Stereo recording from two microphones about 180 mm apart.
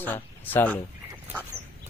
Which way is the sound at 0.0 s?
10° left (ahead or behind).